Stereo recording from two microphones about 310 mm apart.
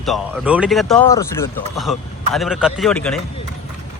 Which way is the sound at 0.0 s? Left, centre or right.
Centre.